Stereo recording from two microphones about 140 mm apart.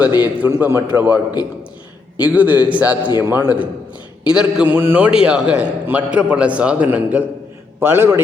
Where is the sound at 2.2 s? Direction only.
10° right (ahead or behind).